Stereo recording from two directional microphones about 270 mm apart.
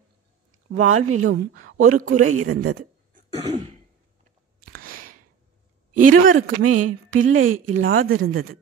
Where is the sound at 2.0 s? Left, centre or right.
Right.